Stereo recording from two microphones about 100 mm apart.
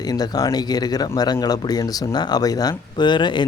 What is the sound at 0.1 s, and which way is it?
Speech, 40° left (ahead or behind).